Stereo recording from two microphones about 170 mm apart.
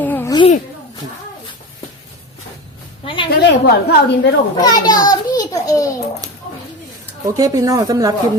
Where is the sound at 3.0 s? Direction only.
30° left (ahead or behind).